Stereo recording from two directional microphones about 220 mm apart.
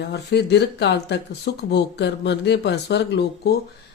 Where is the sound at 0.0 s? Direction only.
50° left (ahead or behind).